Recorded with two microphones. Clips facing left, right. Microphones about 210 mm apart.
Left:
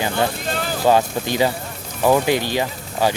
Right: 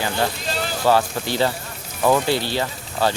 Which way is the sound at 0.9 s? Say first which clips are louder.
Left 2 dB; 15° left (ahead or behind).